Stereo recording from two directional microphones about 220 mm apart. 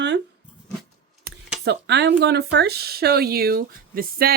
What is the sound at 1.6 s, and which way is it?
Speech, 50° right (ahead or behind).